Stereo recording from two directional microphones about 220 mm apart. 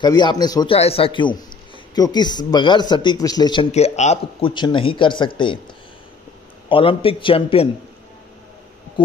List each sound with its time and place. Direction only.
0.0 s a man's voice: 20° left (ahead or behind)
6.7 s a man's voice: 25° left (ahead or behind)